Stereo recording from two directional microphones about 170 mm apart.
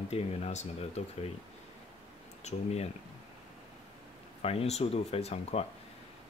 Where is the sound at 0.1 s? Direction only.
40° left (ahead or behind).